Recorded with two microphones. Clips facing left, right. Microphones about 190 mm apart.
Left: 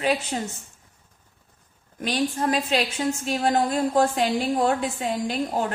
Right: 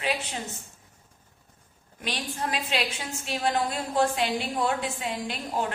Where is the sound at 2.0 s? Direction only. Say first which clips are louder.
Left 8 dB; 45° left (ahead or behind).